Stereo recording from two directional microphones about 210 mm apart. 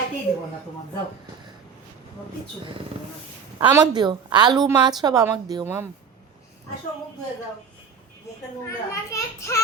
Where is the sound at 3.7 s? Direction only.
20° right (ahead or behind).